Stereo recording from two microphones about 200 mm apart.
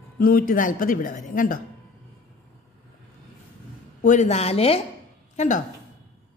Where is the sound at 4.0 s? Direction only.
40° left (ahead or behind).